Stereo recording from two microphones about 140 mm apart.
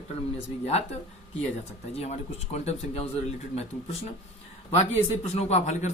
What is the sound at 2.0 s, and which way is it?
Speech, 50° left (ahead or behind).